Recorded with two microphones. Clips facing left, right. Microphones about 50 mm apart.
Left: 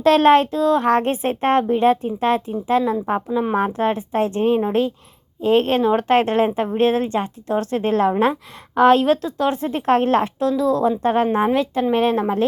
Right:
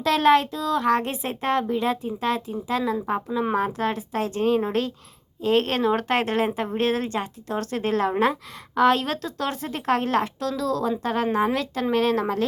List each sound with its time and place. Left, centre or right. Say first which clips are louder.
0.0 s a woman's voice: left 5 dB; left